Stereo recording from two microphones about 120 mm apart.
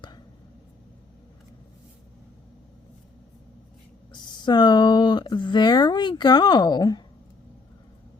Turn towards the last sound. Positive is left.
turn(degrees=35)  # may be behind; listen again after turning